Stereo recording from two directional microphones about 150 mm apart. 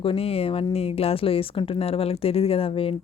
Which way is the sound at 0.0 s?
40° left (ahead or behind).